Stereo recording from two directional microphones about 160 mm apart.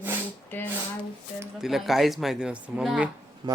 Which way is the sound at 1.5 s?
Centre (ahead or behind).